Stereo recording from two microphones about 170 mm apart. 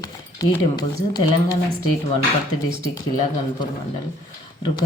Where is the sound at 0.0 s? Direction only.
20° left (ahead or behind).